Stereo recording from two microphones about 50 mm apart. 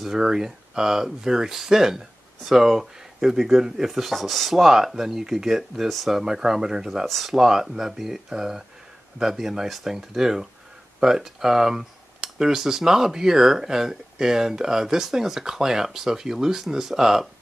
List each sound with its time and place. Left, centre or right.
0.0 s speech: centre
7.1 s speech: centre
7.3 s speech: centre